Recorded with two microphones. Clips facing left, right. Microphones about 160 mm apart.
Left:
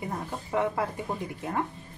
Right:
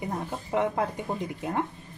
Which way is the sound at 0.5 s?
20° right (ahead or behind).